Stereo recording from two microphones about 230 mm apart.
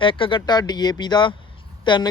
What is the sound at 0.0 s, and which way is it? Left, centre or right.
A man's voice, left.